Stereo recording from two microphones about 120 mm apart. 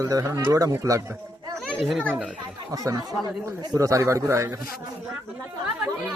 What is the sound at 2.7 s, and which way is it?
Speech, 30° right (ahead or behind).